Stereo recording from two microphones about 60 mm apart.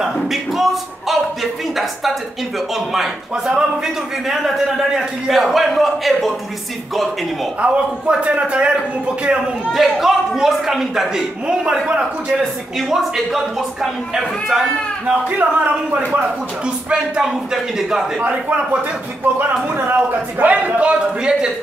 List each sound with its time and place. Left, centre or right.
0.0 s a sound: centre
2.7 s a man's voice: centre
7.6 s a man's voice: centre
9.7 s a man's voice: centre
15.0 s a man's voice: right
16.1 s speech: centre
18.2 s a man's voice: right
19.3 s speech: right
20.6 s speech: right